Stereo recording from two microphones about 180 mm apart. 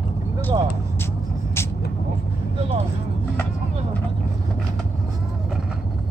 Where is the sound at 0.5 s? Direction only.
25° right (ahead or behind).